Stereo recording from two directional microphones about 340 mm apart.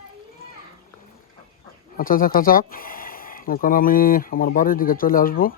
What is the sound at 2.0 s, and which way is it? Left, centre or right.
Speech, left.